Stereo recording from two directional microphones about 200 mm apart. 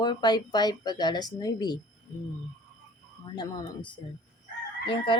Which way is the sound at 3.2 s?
25° left (ahead or behind).